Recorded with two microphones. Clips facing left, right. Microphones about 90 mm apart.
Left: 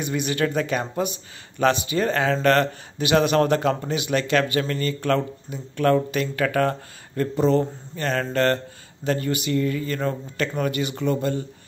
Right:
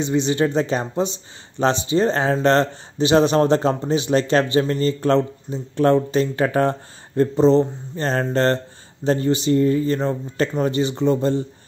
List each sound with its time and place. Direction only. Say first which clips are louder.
0.0 s speech: right 5 dB; 25° right (ahead or behind)